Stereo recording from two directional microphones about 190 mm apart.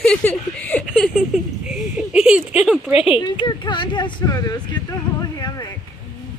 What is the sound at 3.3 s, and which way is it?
Speech, 25° left (ahead or behind).